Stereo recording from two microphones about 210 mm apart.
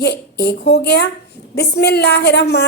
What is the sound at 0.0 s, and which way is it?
A woman's voice, 55° left (ahead or behind).